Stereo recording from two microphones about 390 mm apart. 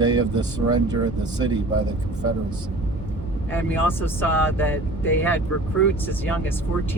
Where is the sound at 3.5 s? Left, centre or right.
Centre.